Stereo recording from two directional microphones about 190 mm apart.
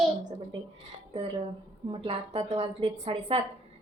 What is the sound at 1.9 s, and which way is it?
A woman's voice, 30° right (ahead or behind).